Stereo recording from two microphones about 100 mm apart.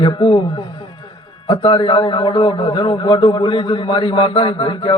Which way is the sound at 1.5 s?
55° left (ahead or behind).